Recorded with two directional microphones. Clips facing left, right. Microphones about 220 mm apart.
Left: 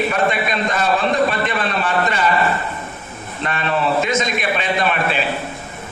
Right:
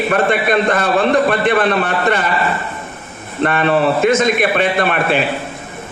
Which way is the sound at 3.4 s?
55° right (ahead or behind).